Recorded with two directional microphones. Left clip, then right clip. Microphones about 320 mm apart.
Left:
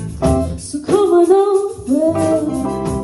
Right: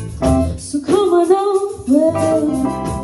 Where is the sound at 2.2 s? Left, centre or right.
Right.